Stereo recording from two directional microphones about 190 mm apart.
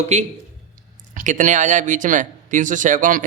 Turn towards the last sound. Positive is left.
turn(degrees=-45)  # may be behind; listen again after turning